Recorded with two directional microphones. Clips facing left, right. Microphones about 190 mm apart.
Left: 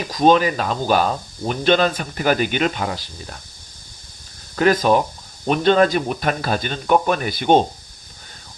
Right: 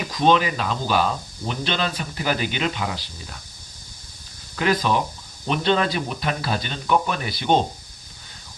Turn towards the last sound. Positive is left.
turn(degrees=50)  # may be behind; listen again after turning